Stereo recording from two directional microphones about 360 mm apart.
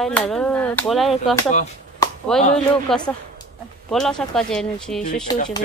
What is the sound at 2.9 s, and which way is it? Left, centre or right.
Speech, centre.